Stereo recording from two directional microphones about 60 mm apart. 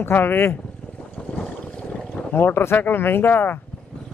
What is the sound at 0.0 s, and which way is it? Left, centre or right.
Speech, left.